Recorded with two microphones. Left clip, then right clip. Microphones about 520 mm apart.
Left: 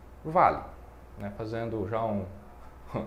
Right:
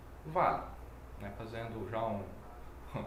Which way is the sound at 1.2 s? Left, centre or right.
Left.